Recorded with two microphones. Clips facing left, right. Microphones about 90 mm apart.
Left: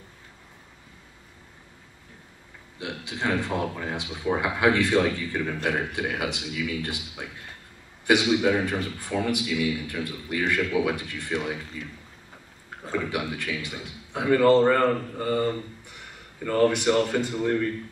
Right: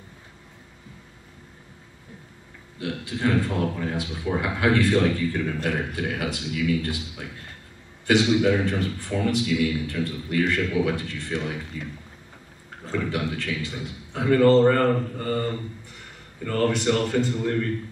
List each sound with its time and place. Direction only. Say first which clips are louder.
2.8 s a man's voice: right 4 dB; 20° left (ahead or behind)
12.8 s a man's voice: right 1 dB; 15° left (ahead or behind)